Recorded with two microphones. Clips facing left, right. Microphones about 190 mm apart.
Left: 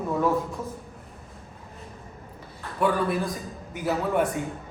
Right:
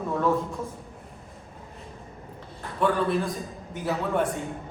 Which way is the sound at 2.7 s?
10° left (ahead or behind).